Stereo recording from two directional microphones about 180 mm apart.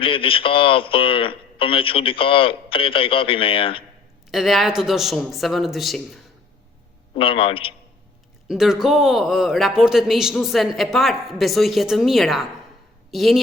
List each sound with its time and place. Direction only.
0.0 s speech: 30° left (ahead or behind)
4.3 s a man's voice: centre (ahead or behind)
7.2 s speech: 30° left (ahead or behind)
8.4 s a man's voice: centre (ahead or behind)